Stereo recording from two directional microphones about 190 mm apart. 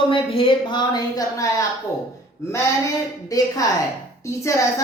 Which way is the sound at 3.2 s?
20° left (ahead or behind).